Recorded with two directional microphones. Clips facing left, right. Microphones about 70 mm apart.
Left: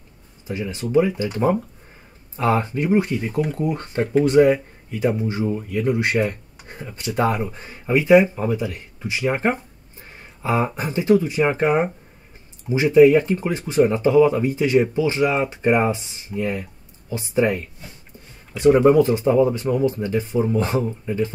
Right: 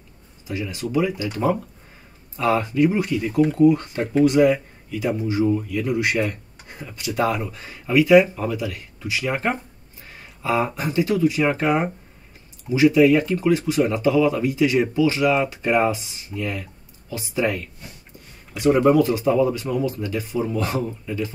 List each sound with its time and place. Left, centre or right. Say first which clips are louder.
0.5 s speech: left 2 dB; left
18.7 s speech: left 2 dB; centre